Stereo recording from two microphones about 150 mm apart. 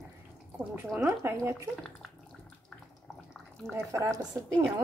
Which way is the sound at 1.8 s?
5° left (ahead or behind).